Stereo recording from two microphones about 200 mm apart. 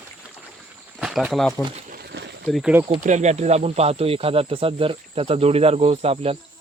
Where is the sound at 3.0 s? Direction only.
35° right (ahead or behind).